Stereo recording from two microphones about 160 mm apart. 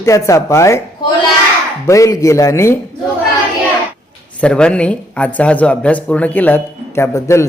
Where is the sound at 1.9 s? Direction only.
20° left (ahead or behind).